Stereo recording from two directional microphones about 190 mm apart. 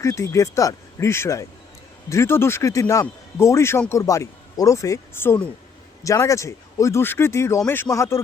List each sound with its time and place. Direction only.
0.0 s a man's voice: 15° left (ahead or behind)